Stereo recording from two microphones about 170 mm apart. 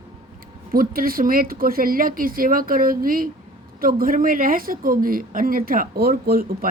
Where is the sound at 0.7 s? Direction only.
60° right (ahead or behind).